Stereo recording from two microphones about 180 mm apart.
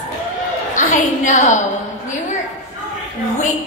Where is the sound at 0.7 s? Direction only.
45° left (ahead or behind).